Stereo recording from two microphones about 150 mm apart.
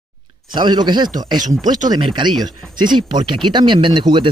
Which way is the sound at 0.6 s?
30° right (ahead or behind).